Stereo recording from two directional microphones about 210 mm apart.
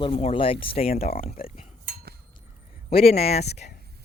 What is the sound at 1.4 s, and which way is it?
Cutlery, 45° left (ahead or behind).